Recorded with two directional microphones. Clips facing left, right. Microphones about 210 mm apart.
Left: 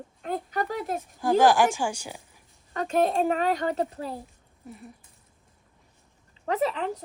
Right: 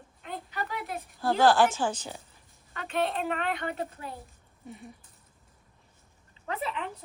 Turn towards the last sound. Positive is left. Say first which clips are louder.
# left 8 dB
turn(degrees=35)  # may be behind; listen again after turning